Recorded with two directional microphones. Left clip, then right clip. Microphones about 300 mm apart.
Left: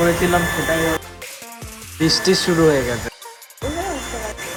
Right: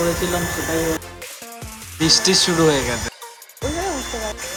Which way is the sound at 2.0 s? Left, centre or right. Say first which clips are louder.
Right 1 dB; centre.